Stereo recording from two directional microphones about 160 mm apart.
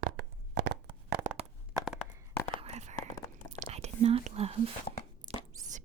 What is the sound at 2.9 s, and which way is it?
Whispering, 20° left (ahead or behind).